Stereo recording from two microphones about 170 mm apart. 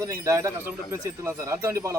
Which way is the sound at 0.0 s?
15° right (ahead or behind).